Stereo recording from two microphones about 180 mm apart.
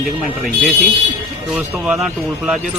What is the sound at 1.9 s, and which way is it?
Speech, 5° right (ahead or behind).